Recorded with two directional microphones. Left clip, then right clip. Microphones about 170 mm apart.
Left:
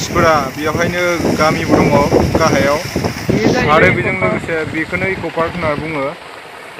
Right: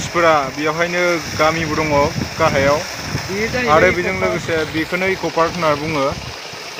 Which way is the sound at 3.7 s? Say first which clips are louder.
Right 1 dB; 5° right (ahead or behind).